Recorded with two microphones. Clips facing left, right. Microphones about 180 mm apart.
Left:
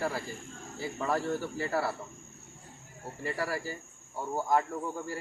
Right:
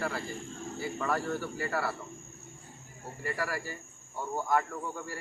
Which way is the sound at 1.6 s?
25° left (ahead or behind).